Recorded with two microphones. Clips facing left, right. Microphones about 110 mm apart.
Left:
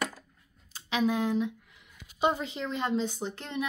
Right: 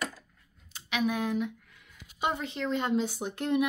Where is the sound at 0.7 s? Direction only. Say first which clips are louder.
Left 2 dB; 30° left (ahead or behind).